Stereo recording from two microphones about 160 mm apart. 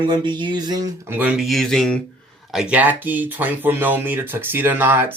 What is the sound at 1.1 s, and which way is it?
Speech, 10° right (ahead or behind).